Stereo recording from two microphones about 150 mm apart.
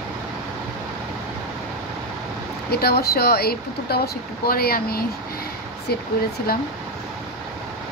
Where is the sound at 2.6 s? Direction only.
90° left.